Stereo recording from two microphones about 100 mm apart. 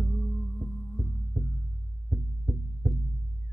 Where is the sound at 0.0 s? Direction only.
20° left (ahead or behind).